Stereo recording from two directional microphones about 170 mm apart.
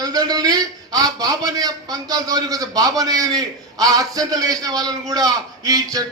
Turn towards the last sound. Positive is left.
turn(degrees=-20)  # may be behind; listen again after turning